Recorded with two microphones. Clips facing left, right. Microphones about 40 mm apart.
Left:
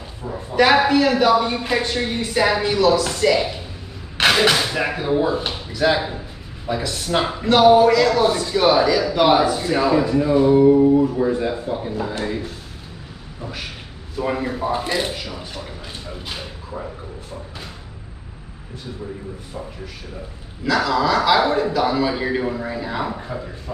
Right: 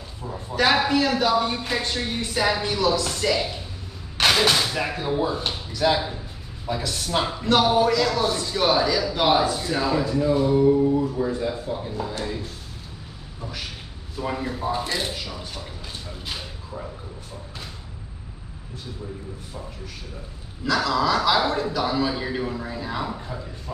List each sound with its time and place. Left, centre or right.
0.6 s a man's voice: centre
4.2 s a sound: left
4.6 s a man's voice: left
8.2 s a man's voice: left; by 9.4 s centre
9.4 s a man's voice: left
14.2 s a man's voice: left
20.6 s a man's voice: centre